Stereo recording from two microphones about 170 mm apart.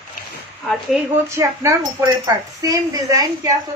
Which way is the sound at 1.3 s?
20° right (ahead or behind).